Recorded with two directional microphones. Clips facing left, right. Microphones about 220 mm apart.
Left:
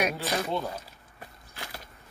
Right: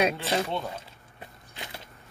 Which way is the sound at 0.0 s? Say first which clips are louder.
Right 3 dB; 30° right (ahead or behind).